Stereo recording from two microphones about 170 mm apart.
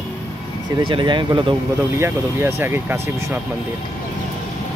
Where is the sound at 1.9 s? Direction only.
15° right (ahead or behind).